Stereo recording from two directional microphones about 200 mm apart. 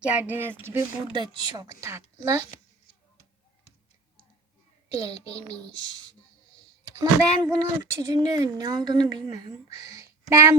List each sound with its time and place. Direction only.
0.1 s a woman's voice: 10° right (ahead or behind)
1.1 s a woman's voice: 25° right (ahead or behind)
4.9 s a child's voice: 20° right (ahead or behind)
5.3 s child singing: 5° left (ahead or behind)
5.7 s a woman's voice: 20° right (ahead or behind)